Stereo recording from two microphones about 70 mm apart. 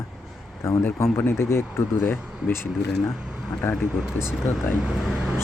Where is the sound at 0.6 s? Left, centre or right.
Left.